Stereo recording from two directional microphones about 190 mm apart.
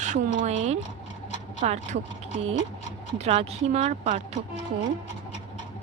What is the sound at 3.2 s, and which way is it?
Speech, 35° right (ahead or behind).